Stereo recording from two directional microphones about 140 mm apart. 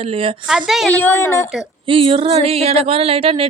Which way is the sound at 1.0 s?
20° left (ahead or behind).